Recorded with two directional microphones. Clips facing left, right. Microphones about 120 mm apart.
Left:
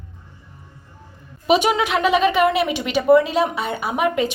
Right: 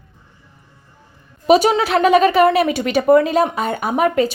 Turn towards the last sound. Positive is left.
turn(degrees=-40)  # may be behind; listen again after turning